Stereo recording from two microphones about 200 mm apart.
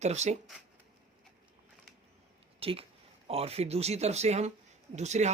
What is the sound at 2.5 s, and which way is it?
Speech, 30° right (ahead or behind).